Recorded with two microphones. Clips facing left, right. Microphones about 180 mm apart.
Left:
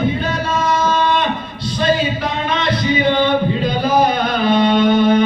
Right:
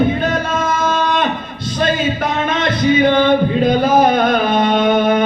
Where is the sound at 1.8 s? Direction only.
50° right (ahead or behind).